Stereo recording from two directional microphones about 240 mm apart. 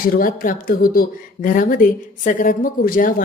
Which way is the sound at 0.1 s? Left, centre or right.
Left.